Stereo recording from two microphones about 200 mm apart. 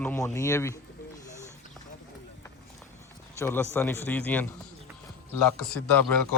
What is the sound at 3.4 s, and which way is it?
Speech, 10° left (ahead or behind).